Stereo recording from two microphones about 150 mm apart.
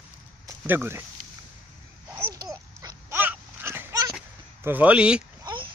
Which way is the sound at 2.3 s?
25° right (ahead or behind).